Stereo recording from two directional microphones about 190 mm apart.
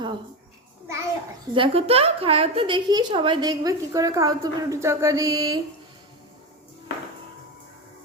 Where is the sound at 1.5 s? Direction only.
30° right (ahead or behind).